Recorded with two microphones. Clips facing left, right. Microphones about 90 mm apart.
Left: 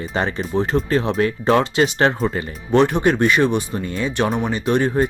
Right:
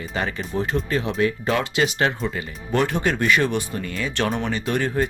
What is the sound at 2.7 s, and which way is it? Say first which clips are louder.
Speech: left 6 dB; 25° left (ahead or behind).